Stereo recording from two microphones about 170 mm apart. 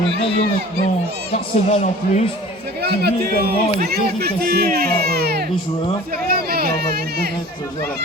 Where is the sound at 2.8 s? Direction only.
65° right (ahead or behind).